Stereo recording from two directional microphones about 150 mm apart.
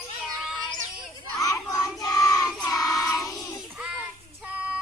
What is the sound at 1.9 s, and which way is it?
Child singing, 25° left (ahead or behind).